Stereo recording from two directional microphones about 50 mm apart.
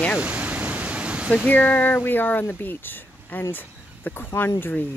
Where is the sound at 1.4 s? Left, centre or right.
Left.